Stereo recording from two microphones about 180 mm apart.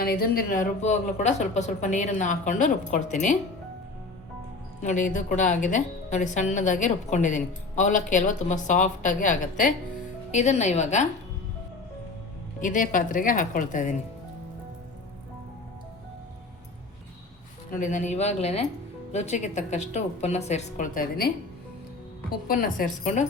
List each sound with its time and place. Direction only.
0.0 s a woman's voice: 60° left (ahead or behind)
4.8 s a woman's voice: 45° left (ahead or behind)
12.6 s a woman's voice: 50° left (ahead or behind)
17.7 s speech: 45° left (ahead or behind)
22.4 s a woman's voice: 50° left (ahead or behind)